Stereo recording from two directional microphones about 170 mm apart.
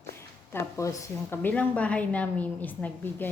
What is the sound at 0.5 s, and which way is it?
A woman's voice, 20° left (ahead or behind).